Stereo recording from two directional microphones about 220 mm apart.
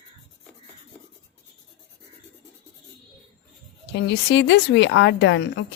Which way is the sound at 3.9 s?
50° left (ahead or behind).